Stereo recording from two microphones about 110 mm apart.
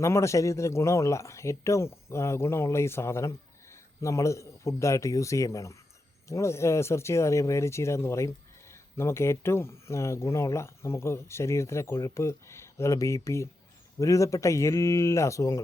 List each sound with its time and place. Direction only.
0.0 s speech: 25° left (ahead or behind)